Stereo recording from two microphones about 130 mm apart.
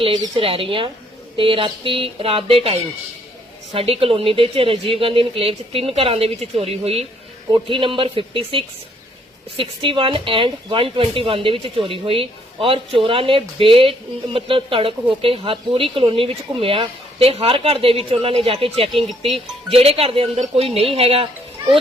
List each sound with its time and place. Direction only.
0.0 s speech: 40° right (ahead or behind)
18.9 s speech: centre (ahead or behind)
19.3 s speech: 50° right (ahead or behind)